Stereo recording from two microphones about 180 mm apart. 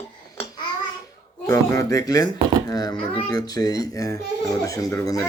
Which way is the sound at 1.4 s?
15° left (ahead or behind).